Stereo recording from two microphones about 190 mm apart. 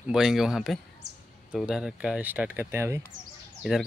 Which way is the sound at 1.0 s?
60° right (ahead or behind).